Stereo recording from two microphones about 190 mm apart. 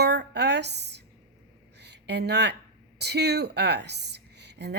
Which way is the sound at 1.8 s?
60° right (ahead or behind).